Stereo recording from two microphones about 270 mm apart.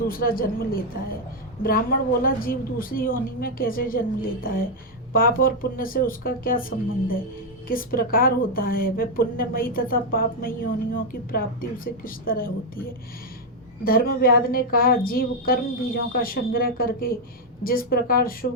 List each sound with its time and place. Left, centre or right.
0.1 s a woman's voice: left